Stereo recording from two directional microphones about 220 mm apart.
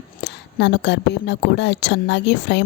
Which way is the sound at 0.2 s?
50° left (ahead or behind).